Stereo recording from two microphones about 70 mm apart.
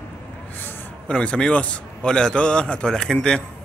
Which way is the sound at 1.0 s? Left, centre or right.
Centre.